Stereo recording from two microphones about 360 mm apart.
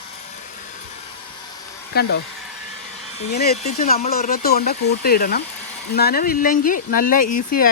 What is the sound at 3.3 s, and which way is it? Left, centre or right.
Speech, left.